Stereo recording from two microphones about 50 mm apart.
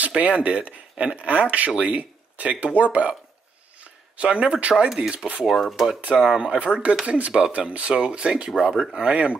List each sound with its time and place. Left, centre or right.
0.2 s speech: right
4.8 s speech: centre
5.1 s speech: right
5.6 s speech: centre
6.1 s speech: centre
6.4 s speech: right
8.9 s speech: right